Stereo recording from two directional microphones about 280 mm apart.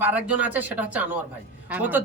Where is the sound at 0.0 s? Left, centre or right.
Centre.